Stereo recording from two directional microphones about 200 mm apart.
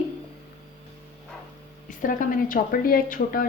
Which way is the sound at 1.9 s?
45° left (ahead or behind).